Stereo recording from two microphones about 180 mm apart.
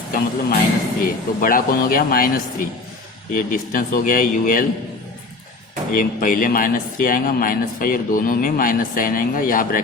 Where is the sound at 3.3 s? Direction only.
50° left (ahead or behind).